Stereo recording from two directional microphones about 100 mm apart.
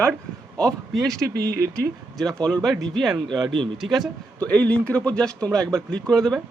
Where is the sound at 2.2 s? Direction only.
10° left (ahead or behind).